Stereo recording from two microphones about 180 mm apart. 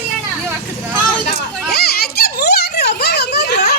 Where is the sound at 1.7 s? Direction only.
60° left (ahead or behind).